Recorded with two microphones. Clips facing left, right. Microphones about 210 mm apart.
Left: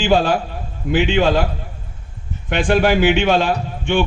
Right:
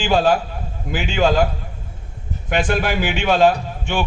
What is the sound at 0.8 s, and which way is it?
Speech, 40° right (ahead or behind).